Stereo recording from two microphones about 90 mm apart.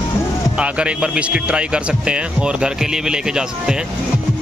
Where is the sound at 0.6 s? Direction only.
10° right (ahead or behind).